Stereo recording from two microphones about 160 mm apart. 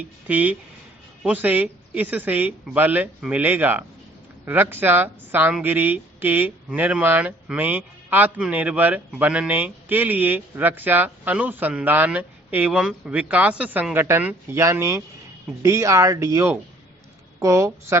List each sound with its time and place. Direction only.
0.0 s speech: 10° right (ahead or behind)